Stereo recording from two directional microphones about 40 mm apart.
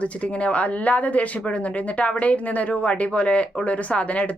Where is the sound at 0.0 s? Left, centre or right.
Left.